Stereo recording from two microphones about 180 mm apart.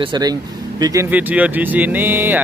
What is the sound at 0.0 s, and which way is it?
Speech, 25° right (ahead or behind).